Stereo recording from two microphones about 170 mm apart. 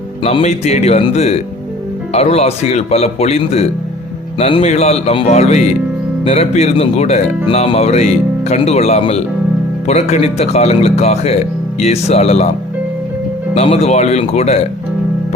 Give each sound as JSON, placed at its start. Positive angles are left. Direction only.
{"t": 0.2, "sound": "speech", "side_deg": 35}
{"t": 13.5, "sound": "speech", "side_deg": 40}